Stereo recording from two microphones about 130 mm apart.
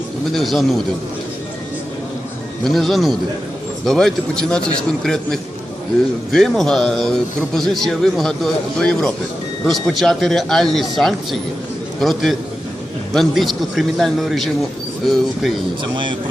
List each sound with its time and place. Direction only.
0.3 s a man's voice: centre (ahead or behind)
2.6 s a man's voice: centre (ahead or behind)
15.8 s speech: 40° right (ahead or behind)